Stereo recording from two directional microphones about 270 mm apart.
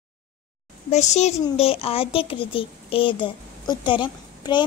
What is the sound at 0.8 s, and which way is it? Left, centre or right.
Speech, left.